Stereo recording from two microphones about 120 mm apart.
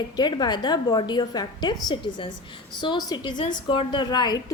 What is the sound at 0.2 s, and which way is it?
A woman's voice, 35° left (ahead or behind).